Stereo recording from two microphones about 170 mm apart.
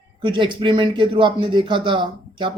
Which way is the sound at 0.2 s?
30° right (ahead or behind).